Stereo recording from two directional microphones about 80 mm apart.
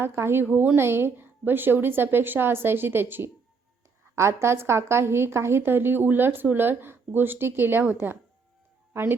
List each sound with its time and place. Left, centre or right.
0.0 s a woman's voice: right